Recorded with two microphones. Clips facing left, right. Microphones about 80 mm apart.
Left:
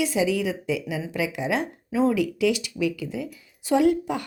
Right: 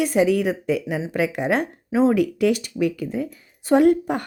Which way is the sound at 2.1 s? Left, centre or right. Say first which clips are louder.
Right 3 dB; right.